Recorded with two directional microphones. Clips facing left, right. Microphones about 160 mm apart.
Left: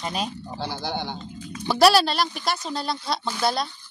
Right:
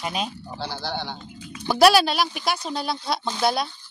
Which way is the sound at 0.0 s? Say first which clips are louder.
Even; 5° right (ahead or behind).